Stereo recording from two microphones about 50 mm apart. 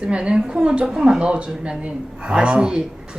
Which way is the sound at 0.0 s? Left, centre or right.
Right.